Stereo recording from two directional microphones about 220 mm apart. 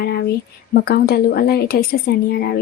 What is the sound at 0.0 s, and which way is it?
Speech, 45° left (ahead or behind).